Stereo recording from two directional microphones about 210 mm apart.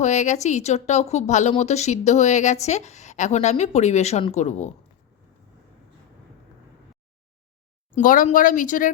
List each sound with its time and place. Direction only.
0.0 s speech: 35° left (ahead or behind)
7.9 s speech: 40° left (ahead or behind)